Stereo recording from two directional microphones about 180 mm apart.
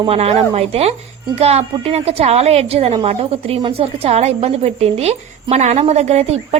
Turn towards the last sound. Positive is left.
turn(degrees=-35)  # may be behind; listen again after turning